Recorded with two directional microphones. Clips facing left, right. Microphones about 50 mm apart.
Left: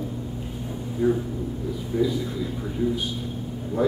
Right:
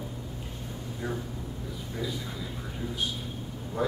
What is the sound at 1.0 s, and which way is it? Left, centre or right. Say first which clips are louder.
Speech: left 13 dB; centre.